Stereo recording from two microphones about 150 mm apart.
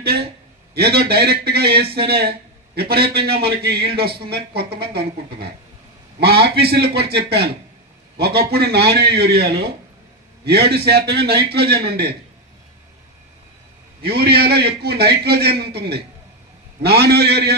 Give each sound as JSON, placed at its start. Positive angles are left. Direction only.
{"t": 0.7, "sound": "a man's voice", "side_deg": -90}
{"t": 14.0, "sound": "speech", "side_deg": -90}